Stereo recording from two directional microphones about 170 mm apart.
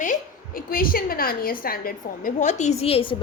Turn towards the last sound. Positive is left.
turn(degrees=35)  # may be behind; listen again after turning